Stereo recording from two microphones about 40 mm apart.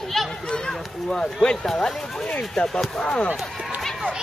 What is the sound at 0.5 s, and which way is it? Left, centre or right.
Speech, centre.